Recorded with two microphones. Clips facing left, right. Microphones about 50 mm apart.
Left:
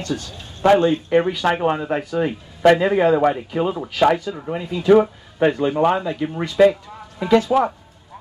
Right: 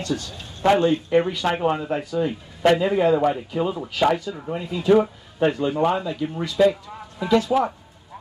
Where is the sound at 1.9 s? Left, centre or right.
Left.